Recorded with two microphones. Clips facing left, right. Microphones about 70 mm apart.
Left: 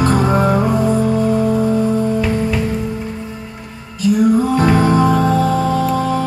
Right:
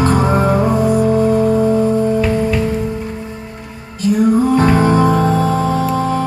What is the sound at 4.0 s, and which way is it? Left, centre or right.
Music, right.